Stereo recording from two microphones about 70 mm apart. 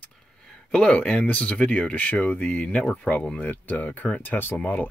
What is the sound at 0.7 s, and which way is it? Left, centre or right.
Speech, centre.